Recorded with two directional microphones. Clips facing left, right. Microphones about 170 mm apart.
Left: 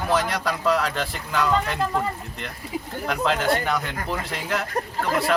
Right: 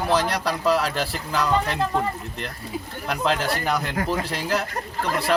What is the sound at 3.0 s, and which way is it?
Speech, centre (ahead or behind).